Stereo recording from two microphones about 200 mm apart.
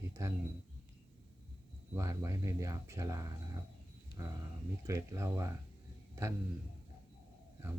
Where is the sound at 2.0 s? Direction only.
15° right (ahead or behind).